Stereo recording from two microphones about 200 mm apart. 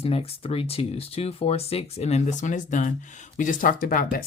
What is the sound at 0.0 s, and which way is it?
Speech, 30° left (ahead or behind).